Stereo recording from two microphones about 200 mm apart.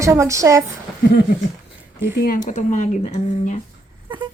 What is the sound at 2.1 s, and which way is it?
Speech, 50° left (ahead or behind).